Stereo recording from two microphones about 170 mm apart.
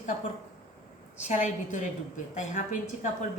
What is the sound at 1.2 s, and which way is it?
A woman's voice, 45° left (ahead or behind).